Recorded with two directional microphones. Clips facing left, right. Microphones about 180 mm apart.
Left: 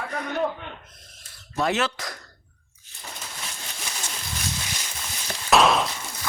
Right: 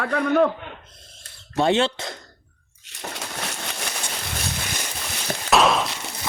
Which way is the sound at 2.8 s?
75° right (ahead or behind).